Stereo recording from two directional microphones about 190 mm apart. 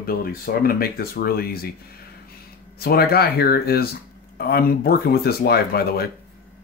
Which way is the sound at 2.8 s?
55° left (ahead or behind).